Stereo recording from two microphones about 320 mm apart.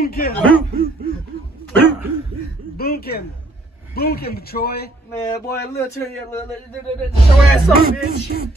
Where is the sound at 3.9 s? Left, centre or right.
Left.